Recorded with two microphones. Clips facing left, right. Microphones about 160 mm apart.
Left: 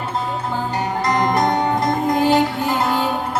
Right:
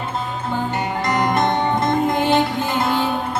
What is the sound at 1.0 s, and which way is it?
Music, 40° left (ahead or behind).